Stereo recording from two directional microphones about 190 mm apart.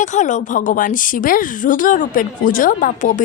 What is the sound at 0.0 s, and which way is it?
A woman's voice, 40° left (ahead or behind).